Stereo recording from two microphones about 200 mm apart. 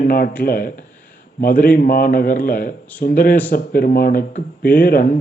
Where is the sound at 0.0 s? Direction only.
45° left (ahead or behind).